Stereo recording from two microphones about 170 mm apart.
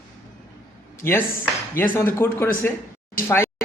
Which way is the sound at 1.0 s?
15° left (ahead or behind).